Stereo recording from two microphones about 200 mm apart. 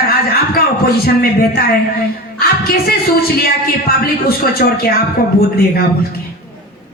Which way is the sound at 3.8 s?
50° left (ahead or behind).